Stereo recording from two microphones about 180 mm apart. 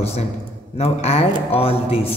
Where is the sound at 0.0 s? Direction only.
35° left (ahead or behind).